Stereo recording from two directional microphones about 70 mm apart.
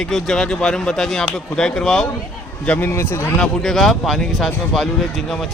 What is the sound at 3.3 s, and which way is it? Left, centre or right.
A man's voice, centre.